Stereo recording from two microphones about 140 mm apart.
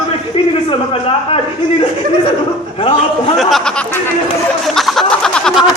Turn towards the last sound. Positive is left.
turn(degrees=5)  # may be behind; listen again after turning